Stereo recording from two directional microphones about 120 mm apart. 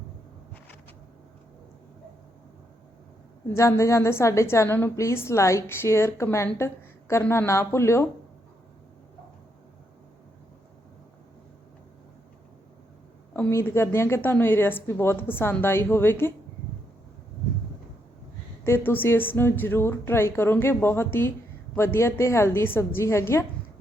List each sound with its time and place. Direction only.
3.5 s a woman's voice: 25° left (ahead or behind)
13.3 s a woman's voice: 20° left (ahead or behind)
18.6 s a woman's voice: 20° left (ahead or behind)